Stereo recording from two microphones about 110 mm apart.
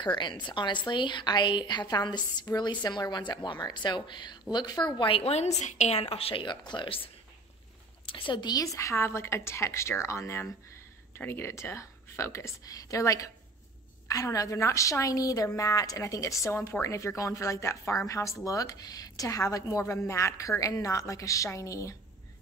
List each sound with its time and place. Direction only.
0.0 s a woman's voice: 45° left (ahead or behind)
8.7 s a woman's voice: 25° left (ahead or behind)